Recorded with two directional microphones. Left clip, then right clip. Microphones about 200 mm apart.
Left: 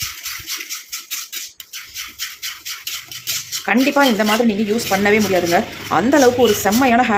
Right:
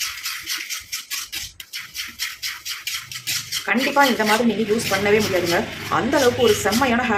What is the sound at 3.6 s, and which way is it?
Dishes, 40° left (ahead or behind).